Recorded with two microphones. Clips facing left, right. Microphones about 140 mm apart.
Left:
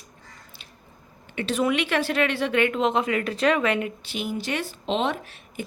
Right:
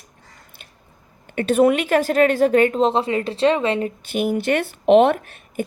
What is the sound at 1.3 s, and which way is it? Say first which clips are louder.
Speech: right 8 dB; 50° right (ahead or behind).